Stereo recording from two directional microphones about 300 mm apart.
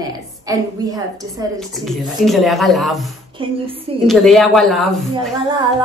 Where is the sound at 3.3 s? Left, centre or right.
Centre.